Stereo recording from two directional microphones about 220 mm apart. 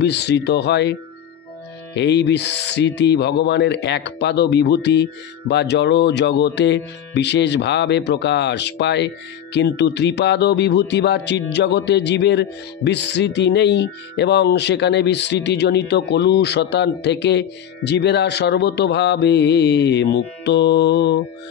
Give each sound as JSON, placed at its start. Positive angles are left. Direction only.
{"t": 0.0, "sound": "speech", "side_deg": 50}
{"t": 2.0, "sound": "speech", "side_deg": 50}